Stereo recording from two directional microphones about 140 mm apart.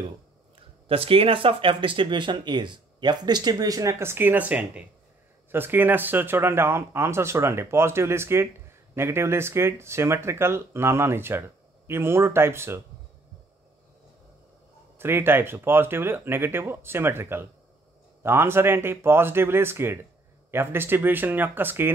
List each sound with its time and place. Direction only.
0.8 s speech: 40° right (ahead or behind); by 12.8 s 15° right (ahead or behind)
15.0 s speech: 15° right (ahead or behind)